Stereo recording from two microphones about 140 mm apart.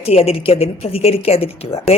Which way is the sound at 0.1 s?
45° left (ahead or behind).